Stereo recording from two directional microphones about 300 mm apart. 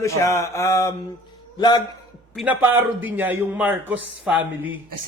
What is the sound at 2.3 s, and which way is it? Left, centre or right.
A man's voice, centre.